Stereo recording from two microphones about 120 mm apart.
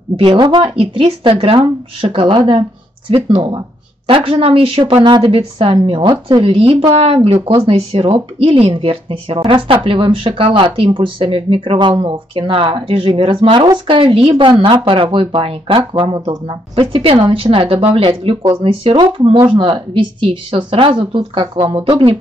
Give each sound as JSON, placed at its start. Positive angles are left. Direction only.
{"t": 0.2, "sound": "speech", "side_deg": -45}
{"t": 14.3, "sound": "speech", "side_deg": -40}